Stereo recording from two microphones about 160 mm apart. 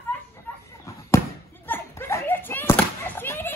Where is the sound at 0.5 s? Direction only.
10° left (ahead or behind).